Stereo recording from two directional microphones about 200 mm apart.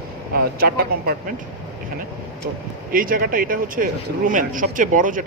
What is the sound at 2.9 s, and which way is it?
Speech, 45° right (ahead or behind).